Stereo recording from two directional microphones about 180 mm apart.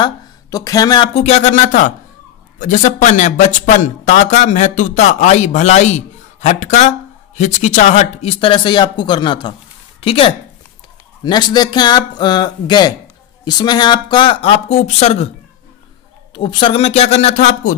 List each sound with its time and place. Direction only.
0.0 s speech: 20° left (ahead or behind)
1.2 s speech: 40° left (ahead or behind)
16.3 s speech: 25° left (ahead or behind)